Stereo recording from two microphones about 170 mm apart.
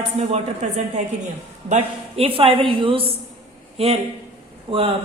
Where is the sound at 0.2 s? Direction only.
40° right (ahead or behind).